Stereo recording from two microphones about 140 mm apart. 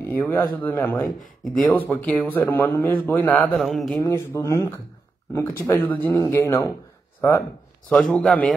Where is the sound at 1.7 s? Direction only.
15° left (ahead or behind).